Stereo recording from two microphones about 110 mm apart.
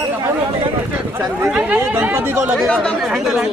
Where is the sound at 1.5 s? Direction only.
10° right (ahead or behind).